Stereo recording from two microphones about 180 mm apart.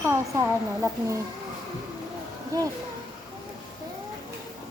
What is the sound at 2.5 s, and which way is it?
Speech, 20° right (ahead or behind).